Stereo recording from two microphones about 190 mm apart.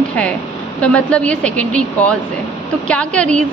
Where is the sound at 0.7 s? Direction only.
5° left (ahead or behind).